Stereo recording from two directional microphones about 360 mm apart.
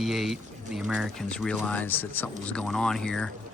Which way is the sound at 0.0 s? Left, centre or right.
Centre.